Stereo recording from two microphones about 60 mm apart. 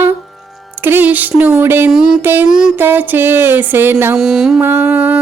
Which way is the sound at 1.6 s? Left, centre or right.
Right.